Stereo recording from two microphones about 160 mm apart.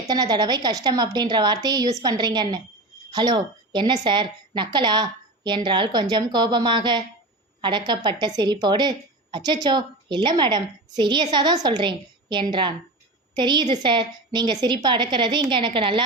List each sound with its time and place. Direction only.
0.1 s a woman's voice: 25° right (ahead or behind)